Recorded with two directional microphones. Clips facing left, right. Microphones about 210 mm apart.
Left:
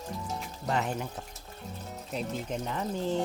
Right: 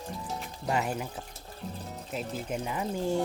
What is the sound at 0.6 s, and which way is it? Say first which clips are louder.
Speech: right 1 dB; 10° right (ahead or behind).